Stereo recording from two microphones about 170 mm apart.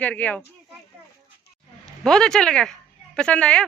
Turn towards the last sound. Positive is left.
turn(degrees=5)  # may be behind; listen again after turning